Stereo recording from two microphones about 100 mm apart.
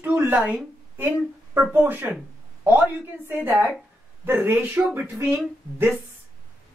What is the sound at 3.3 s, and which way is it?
Speech, 20° right (ahead or behind).